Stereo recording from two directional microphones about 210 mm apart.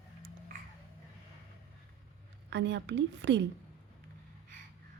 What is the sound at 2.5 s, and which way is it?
Speech, 55° right (ahead or behind).